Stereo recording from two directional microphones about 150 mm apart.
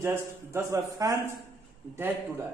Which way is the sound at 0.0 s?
15° right (ahead or behind).